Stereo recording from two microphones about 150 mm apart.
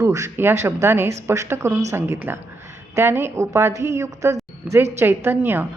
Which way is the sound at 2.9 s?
15° right (ahead or behind).